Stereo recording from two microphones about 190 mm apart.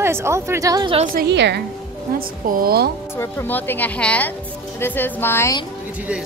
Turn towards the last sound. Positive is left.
turn(degrees=15)  # may be behind; listen again after turning